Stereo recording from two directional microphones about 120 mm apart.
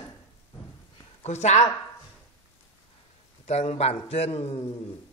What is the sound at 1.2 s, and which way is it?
Speech, 70° left (ahead or behind).